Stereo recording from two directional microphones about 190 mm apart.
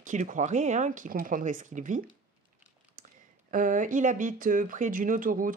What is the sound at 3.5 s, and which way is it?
Speech, 45° right (ahead or behind).